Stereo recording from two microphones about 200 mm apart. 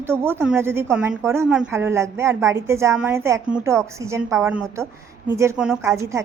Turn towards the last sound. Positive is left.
turn(degrees=-15)  # may be behind; listen again after turning